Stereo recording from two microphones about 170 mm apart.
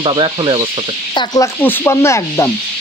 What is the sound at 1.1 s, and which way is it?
Speech, 20° left (ahead or behind).